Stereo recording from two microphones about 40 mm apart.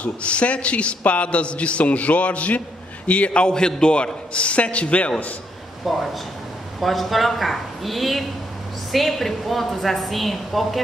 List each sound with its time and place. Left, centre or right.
0.0 s a man's voice: left
5.9 s a woman's voice: centre